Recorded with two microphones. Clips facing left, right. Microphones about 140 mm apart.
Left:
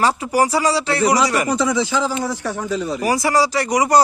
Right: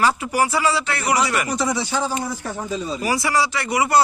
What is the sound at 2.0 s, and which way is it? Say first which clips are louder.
A man's voice: left 3 dB; 90° left.